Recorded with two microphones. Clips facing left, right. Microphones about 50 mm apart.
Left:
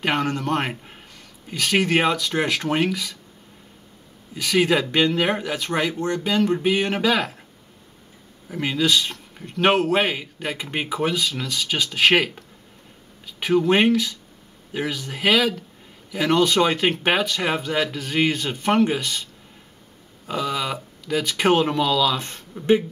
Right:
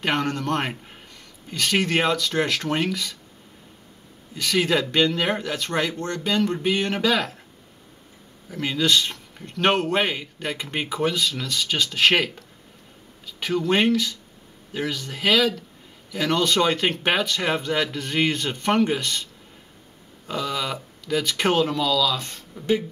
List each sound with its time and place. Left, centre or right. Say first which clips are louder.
0.0 s speech: left 1 dB; centre
4.4 s speech: left 2 dB; centre
8.5 s speech: left 1 dB; centre
20.2 s speech: left 2 dB; centre
21.6 s speech: left 2 dB; left